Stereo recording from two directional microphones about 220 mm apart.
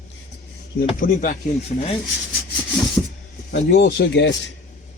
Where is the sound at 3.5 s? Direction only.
50° left (ahead or behind).